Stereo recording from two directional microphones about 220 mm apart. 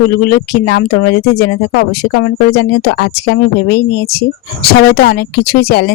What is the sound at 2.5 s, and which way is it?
Speech, 45° left (ahead or behind).